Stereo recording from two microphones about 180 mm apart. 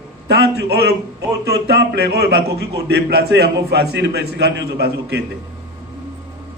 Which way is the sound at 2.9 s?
65° right (ahead or behind).